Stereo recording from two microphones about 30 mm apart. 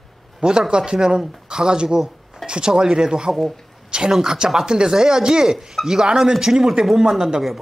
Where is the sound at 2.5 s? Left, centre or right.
Right.